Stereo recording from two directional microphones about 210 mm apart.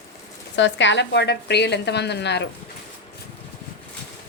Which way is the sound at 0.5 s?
60° left (ahead or behind).